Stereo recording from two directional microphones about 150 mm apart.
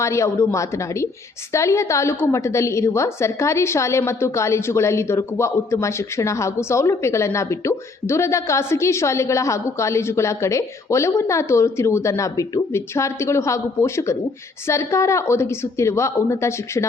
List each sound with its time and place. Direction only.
0.0 s a woman's voice: 20° left (ahead or behind)